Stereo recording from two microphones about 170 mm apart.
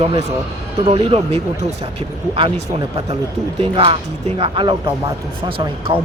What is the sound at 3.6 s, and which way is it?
Speech, 35° right (ahead or behind).